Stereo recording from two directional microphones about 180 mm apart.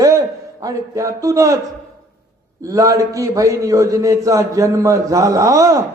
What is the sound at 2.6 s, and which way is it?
A man's voice, 20° right (ahead or behind).